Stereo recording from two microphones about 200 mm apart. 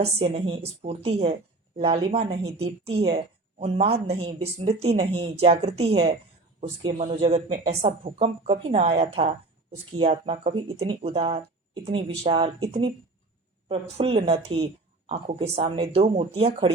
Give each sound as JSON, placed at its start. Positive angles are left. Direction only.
{"t": 0.0, "sound": "speech", "side_deg": -30}